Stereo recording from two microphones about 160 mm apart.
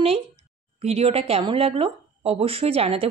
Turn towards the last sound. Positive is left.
turn(degrees=-35)  # may be behind; listen again after turning